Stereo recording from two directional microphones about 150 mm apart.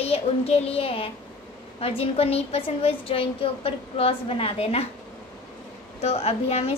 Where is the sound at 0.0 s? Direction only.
40° left (ahead or behind).